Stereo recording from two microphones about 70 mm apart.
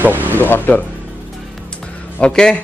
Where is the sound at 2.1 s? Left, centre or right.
Centre.